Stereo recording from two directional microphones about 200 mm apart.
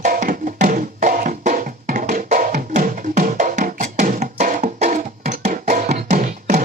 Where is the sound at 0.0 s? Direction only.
40° right (ahead or behind).